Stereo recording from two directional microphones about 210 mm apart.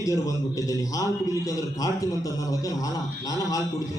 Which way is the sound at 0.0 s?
15° left (ahead or behind).